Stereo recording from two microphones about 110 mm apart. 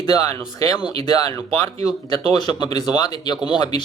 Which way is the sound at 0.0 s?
35° left (ahead or behind).